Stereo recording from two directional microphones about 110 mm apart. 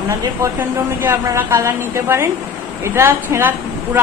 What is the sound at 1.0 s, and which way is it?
A woman's voice, 20° right (ahead or behind).